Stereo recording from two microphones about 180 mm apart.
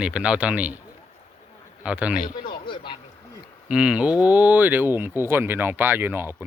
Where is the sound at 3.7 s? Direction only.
5° right (ahead or behind).